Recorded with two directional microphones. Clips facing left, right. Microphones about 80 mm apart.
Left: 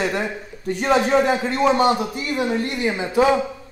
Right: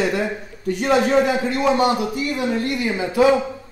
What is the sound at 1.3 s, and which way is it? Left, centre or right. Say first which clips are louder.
A man's voice: left 1 dB; left.